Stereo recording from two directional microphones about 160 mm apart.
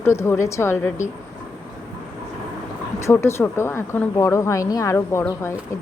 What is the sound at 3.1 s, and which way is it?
A woman's voice, 15° left (ahead or behind).